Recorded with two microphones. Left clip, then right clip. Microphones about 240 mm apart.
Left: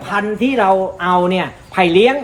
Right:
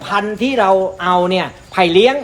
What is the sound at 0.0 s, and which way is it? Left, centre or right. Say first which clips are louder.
A man's voice: even; centre.